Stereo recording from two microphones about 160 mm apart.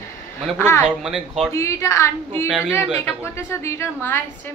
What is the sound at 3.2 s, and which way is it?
A woman's voice, 15° left (ahead or behind).